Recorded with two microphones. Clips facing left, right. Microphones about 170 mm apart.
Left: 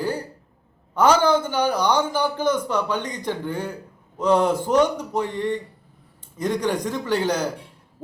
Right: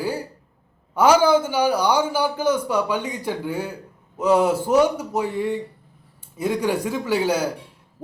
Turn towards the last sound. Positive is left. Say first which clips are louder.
# right 1 dB
turn(degrees=-10)  # may be behind; listen again after turning